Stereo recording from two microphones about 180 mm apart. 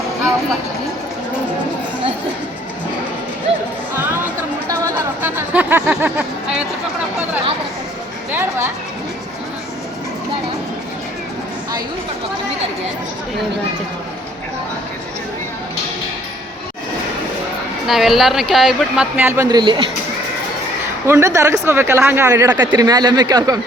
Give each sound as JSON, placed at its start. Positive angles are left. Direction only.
{"t": 4.9, "sound": "a sound", "side_deg": -10}
{"t": 8.3, "sound": "speech", "side_deg": -15}
{"t": 17.8, "sound": "speech", "side_deg": 0}
{"t": 19.5, "sound": "speech", "side_deg": -25}
{"t": 21.1, "sound": "speech", "side_deg": -15}